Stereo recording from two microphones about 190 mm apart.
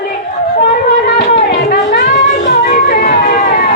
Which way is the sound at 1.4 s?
60° left (ahead or behind).